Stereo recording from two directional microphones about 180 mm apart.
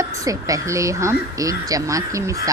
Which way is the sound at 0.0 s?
15° right (ahead or behind).